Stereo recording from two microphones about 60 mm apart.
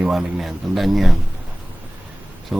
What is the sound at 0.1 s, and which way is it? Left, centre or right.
Speech, centre.